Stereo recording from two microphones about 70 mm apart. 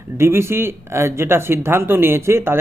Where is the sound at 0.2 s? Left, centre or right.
Right.